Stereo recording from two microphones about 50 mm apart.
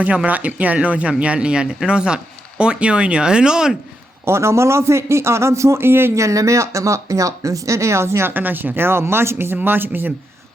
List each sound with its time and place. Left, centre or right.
0.0 s speech: right
4.3 s a man's voice: right
6.1 s speech: right
8.3 s speech: right